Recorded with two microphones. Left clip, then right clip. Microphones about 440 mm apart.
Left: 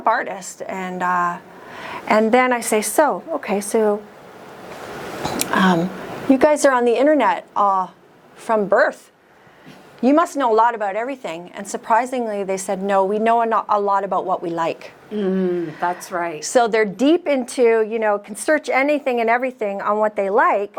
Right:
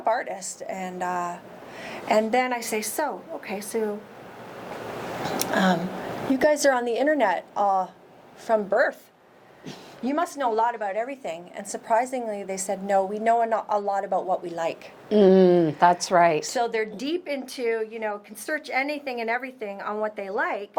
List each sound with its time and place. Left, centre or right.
0.0 s speech: left
5.4 s a sound: left
6.3 s a woman's voice: left
10.0 s a woman's voice: left
15.1 s a woman's voice: right
16.4 s a woman's voice: left